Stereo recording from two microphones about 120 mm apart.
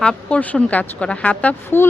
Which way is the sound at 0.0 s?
10° left (ahead or behind).